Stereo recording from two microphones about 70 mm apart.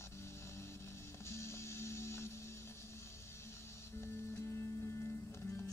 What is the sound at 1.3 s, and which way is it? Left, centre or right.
Music, left.